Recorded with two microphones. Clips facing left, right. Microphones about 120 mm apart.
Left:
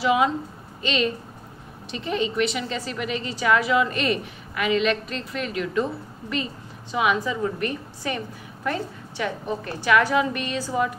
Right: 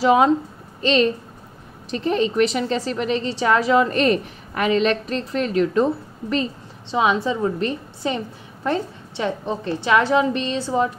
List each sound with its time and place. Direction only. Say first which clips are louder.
0.0 s a woman's voice: right 5 dB; 35° right (ahead or behind)
6.9 s a woman's voice: right 4 dB; 30° right (ahead or behind)